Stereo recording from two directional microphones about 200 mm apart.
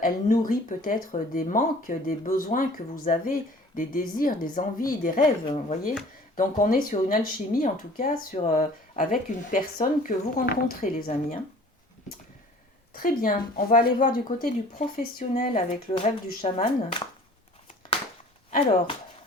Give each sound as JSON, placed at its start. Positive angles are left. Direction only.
{"t": 0.0, "sound": "speech", "side_deg": 45}
{"t": 5.5, "sound": "speech", "side_deg": 35}
{"t": 12.9, "sound": "speech", "side_deg": 45}